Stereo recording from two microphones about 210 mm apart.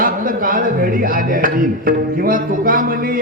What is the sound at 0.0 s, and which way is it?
Speech, 40° right (ahead or behind).